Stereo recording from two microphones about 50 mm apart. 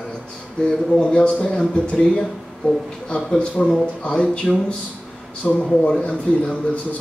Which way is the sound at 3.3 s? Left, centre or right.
Centre.